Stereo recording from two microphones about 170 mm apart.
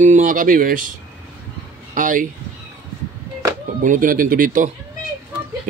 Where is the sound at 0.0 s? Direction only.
45° right (ahead or behind).